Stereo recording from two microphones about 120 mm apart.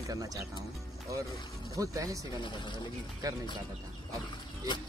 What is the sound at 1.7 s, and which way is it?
Speech, 25° right (ahead or behind).